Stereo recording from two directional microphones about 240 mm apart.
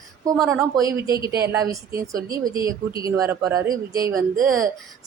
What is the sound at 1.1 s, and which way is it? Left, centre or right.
Speech, centre.